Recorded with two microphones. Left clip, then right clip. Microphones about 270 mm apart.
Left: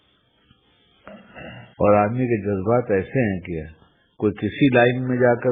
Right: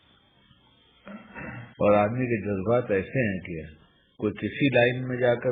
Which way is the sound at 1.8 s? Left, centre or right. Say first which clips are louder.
Left 4 dB; left.